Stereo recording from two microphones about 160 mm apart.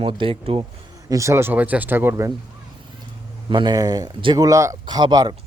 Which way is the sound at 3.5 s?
30° right (ahead or behind).